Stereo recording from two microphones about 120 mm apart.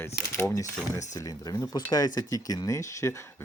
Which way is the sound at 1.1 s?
30° left (ahead or behind).